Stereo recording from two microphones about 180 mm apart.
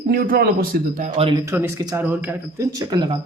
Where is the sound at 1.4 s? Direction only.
15° right (ahead or behind).